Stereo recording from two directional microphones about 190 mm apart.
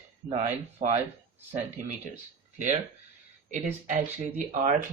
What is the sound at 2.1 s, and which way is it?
Speech, 40° right (ahead or behind).